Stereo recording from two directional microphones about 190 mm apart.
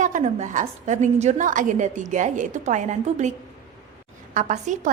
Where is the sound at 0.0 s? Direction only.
40° right (ahead or behind).